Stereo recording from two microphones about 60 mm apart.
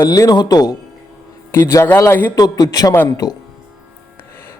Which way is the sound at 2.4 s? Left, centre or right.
Left.